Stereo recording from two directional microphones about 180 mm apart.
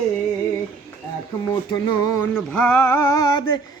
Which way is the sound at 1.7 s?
20° left (ahead or behind).